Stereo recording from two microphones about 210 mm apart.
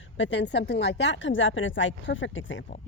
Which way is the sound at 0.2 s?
60° left (ahead or behind).